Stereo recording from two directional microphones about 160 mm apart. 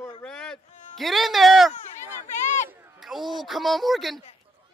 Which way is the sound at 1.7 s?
45° left (ahead or behind).